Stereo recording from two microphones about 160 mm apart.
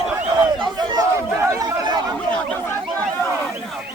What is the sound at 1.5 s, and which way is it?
Chatter, 20° right (ahead or behind).